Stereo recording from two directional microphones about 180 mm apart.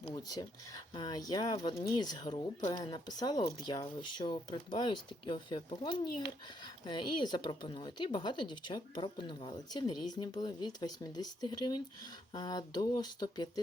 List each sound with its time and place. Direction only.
0.1 s speech: 20° left (ahead or behind)